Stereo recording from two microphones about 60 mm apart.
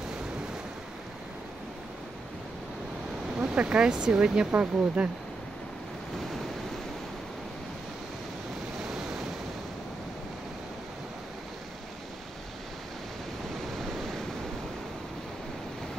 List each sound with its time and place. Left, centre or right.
3.3 s speech: centre
4.5 s speech: right